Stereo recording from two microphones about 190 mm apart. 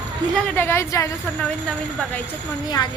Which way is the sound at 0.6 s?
15° left (ahead or behind).